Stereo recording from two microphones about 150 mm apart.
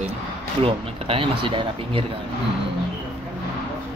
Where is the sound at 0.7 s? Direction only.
35° right (ahead or behind).